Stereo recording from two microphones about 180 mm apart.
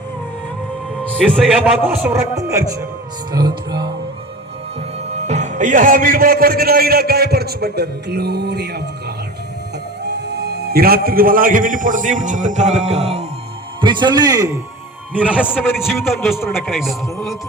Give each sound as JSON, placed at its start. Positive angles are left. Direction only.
{"t": 1.0, "sound": "a man's voice", "side_deg": 5}
{"t": 2.0, "sound": "a man's voice", "side_deg": -15}
{"t": 5.1, "sound": "a man's voice", "side_deg": -40}
{"t": 13.8, "sound": "a man's voice", "side_deg": -25}
{"t": 15.1, "sound": "speech", "side_deg": -5}